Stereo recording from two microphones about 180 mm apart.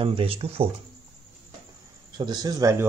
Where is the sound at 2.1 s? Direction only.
25° right (ahead or behind).